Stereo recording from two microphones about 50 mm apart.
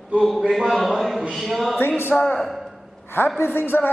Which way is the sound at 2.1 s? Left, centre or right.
Centre.